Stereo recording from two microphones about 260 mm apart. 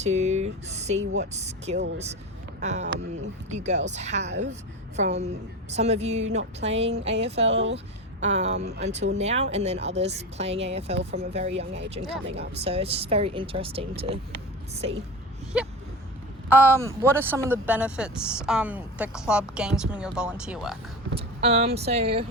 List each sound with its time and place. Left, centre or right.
0.0 s speech: right
7.5 s speech: right
8.2 s speech: right
15.5 s speech: centre
21.2 s speech: right